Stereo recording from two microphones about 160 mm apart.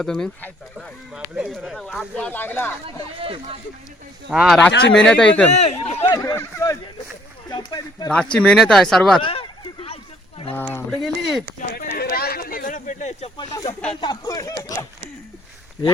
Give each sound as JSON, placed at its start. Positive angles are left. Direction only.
{"t": 0.0, "sound": "speech", "side_deg": 5}
{"t": 3.2, "sound": "speech", "side_deg": -35}
{"t": 4.3, "sound": "speech", "side_deg": -5}
{"t": 4.7, "sound": "speech", "side_deg": 90}
{"t": 5.0, "sound": "speech", "side_deg": 5}
{"t": 5.5, "sound": "speech", "side_deg": 45}
{"t": 6.1, "sound": "speech", "side_deg": 20}
{"t": 8.1, "sound": "speech", "side_deg": 5}
{"t": 9.2, "sound": "a sound", "side_deg": 35}
{"t": 11.0, "sound": "speech", "side_deg": -5}
{"t": 11.7, "sound": "snake", "side_deg": 75}
{"t": 13.3, "sound": "speech", "side_deg": 25}